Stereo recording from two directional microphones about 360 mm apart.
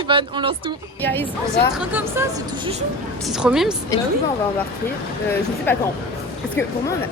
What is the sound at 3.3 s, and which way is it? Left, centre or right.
Speech, centre.